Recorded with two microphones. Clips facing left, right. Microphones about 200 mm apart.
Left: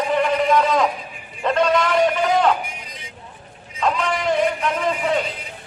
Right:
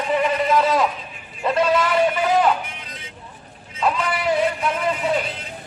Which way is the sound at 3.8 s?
5° right (ahead or behind).